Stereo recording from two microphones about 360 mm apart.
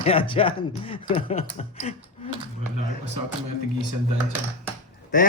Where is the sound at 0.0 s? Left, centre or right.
Centre.